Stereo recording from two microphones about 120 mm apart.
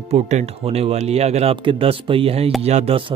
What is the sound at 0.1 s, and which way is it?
Speech, 65° right (ahead or behind).